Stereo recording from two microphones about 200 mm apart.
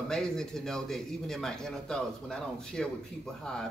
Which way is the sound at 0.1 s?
5° left (ahead or behind).